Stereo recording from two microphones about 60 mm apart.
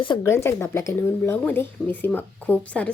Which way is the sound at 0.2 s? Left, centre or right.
Left.